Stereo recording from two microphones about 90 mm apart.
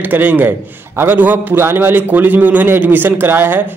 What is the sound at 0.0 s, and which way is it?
A man's voice, 20° right (ahead or behind).